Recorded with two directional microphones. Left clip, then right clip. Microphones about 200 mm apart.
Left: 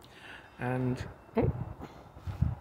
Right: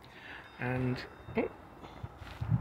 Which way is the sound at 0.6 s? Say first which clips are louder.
Left 2 dB; 15° left (ahead or behind).